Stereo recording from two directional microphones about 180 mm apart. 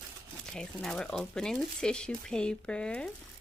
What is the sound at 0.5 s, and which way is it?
Speech, 5° left (ahead or behind).